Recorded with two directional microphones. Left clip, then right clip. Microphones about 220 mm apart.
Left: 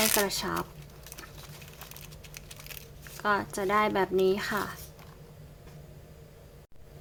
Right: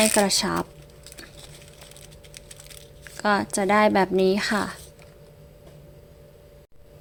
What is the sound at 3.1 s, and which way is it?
Speech, 25° right (ahead or behind).